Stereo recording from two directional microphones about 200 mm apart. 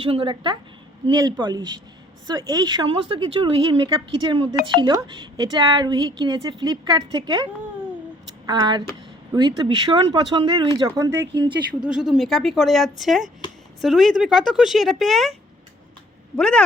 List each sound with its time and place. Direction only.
0.0 s speech: 25° right (ahead or behind)
8.4 s speech: 20° right (ahead or behind)
11.9 s speech: 5° right (ahead or behind)
16.4 s speech: 5° left (ahead or behind)